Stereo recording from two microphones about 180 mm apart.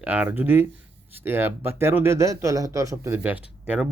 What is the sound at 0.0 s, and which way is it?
Speech, 10° right (ahead or behind).